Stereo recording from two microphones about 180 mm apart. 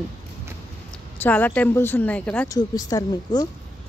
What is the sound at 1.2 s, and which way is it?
Speech, 10° left (ahead or behind).